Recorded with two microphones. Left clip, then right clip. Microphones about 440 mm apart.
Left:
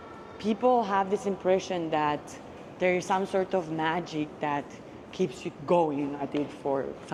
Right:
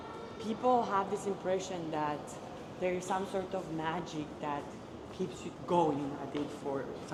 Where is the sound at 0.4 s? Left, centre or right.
Left.